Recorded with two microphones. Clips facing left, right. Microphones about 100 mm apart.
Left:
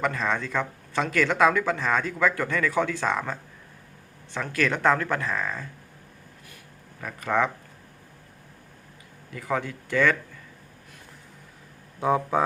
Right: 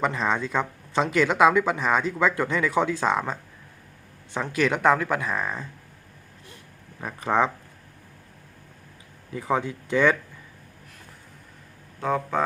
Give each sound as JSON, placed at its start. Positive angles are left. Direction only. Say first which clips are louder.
{"t": 0.0, "sound": "speech", "louder": "right 2 dB", "side_deg": -20}
{"t": 7.0, "sound": "speech", "louder": "right 2 dB", "side_deg": -20}
{"t": 9.3, "sound": "speech", "louder": "right 3 dB", "side_deg": -20}
{"t": 11.9, "sound": "speech", "louder": "left 2 dB", "side_deg": 10}